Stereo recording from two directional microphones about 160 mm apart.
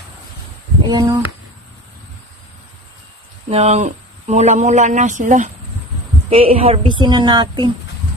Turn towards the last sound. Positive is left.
turn(degrees=-30)  # may be behind; listen again after turning